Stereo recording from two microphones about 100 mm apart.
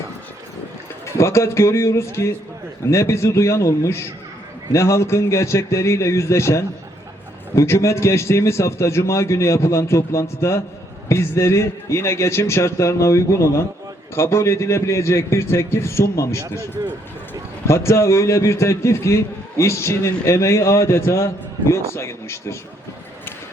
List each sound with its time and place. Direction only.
1.0 s a man's voice: 30° left (ahead or behind)
17.7 s a man's voice: 30° left (ahead or behind)